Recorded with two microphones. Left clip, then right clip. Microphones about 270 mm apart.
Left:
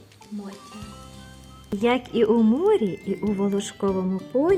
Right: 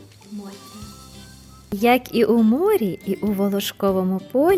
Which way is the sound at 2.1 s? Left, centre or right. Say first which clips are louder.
Right 2 dB; right.